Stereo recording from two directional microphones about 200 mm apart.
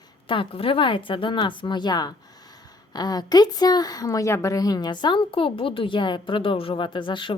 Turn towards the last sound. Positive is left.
turn(degrees=25)  # may be behind; listen again after turning